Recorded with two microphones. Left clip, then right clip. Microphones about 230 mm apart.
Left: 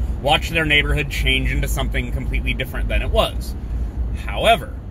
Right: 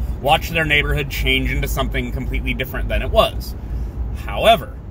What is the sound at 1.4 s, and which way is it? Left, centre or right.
Speech, centre.